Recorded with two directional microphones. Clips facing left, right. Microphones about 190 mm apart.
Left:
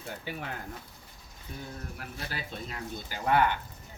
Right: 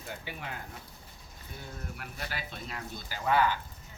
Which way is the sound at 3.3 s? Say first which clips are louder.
Left 1 dB; 60° left (ahead or behind).